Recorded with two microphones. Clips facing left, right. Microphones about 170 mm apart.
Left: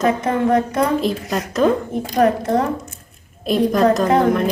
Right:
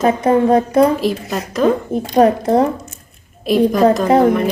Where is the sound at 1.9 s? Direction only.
30° right (ahead or behind).